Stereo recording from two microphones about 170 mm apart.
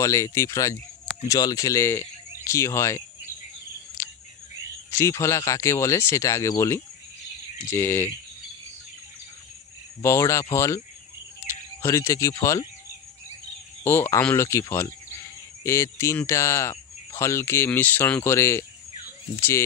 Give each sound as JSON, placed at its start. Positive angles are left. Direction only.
{"t": 0.0, "sound": "speech", "side_deg": 20}
{"t": 4.0, "sound": "a sound", "side_deg": 15}
{"t": 4.9, "sound": "speech", "side_deg": 15}
{"t": 10.0, "sound": "speech", "side_deg": 15}
{"t": 11.8, "sound": "speech", "side_deg": 15}
{"t": 13.8, "sound": "cricket", "side_deg": 15}